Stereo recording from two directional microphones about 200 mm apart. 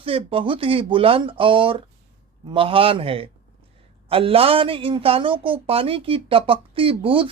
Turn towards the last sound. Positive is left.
turn(degrees=-25)  # may be behind; listen again after turning